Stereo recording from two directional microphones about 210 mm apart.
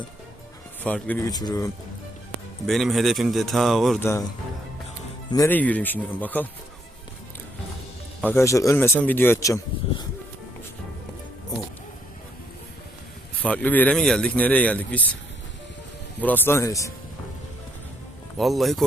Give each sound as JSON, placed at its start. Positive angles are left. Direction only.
{"t": 0.9, "sound": "speech", "side_deg": 5}
{"t": 1.3, "sound": "speech", "side_deg": 20}
{"t": 2.6, "sound": "speech", "side_deg": 0}
{"t": 4.0, "sound": "speech", "side_deg": 15}
{"t": 5.3, "sound": "speech", "side_deg": 10}
{"t": 8.2, "sound": "speech", "side_deg": 10}
{"t": 13.4, "sound": "speech", "side_deg": 5}
{"t": 16.2, "sound": "speech", "side_deg": 10}
{"t": 18.3, "sound": "speech", "side_deg": 0}